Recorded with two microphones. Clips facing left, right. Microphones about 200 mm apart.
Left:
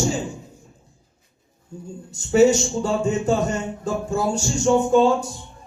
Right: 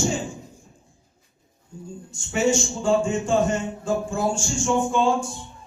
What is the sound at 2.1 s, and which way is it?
A man's voice, 40° left (ahead or behind).